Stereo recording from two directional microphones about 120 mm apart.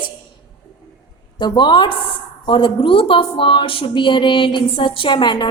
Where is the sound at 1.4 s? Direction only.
40° left (ahead or behind).